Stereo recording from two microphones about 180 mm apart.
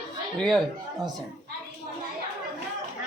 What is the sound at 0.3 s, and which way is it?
Speech, 5° left (ahead or behind).